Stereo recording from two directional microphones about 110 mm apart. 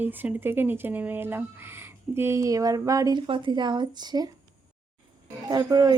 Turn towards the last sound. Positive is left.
turn(degrees=-35)  # may be behind; listen again after turning